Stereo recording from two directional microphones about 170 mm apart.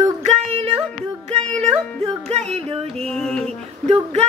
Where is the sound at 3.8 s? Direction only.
40° right (ahead or behind).